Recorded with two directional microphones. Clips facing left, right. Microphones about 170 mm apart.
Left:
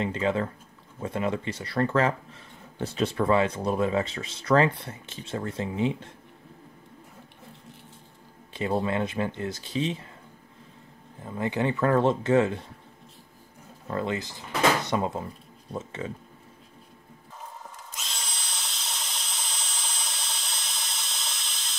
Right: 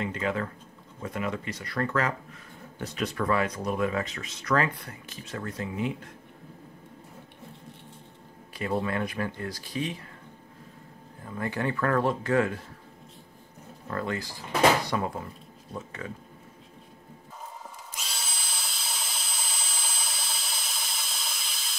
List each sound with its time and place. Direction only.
0.0 s speech: 30° left (ahead or behind)
8.5 s speech: 25° left (ahead or behind)
11.2 s speech: 20° left (ahead or behind)
13.8 s speech: 20° left (ahead or behind)
17.9 s drill: 5° right (ahead or behind)